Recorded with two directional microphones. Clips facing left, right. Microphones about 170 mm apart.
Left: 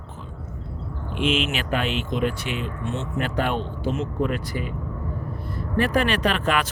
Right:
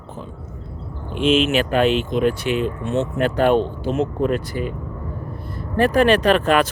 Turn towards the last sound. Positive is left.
turn(degrees=-40)  # may be behind; listen again after turning